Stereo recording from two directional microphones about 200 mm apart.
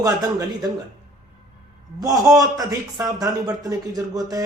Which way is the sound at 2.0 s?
20° right (ahead or behind).